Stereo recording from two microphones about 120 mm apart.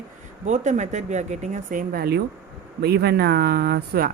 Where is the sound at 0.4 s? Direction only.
90° right.